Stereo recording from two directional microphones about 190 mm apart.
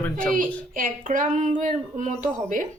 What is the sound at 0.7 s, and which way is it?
A woman's voice, 45° right (ahead or behind).